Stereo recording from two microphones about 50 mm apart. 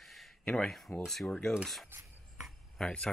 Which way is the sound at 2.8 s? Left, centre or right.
Centre.